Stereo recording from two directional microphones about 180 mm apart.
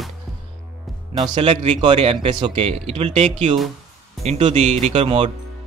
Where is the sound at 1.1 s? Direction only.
30° right (ahead or behind).